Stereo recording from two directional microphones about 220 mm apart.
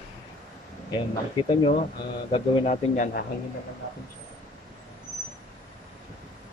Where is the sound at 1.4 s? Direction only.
20° left (ahead or behind).